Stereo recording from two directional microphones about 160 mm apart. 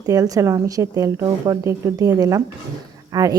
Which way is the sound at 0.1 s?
20° right (ahead or behind).